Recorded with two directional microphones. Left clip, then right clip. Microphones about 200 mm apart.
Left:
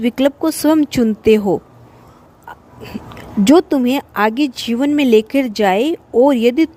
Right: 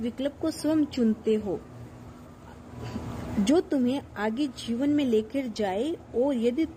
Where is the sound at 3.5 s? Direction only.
45° left (ahead or behind).